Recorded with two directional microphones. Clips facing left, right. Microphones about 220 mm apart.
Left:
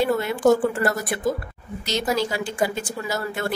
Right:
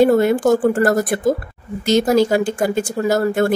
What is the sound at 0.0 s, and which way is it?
Speech, 45° right (ahead or behind).